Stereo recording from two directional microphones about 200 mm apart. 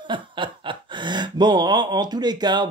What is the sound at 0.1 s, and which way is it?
Speech, 25° right (ahead or behind).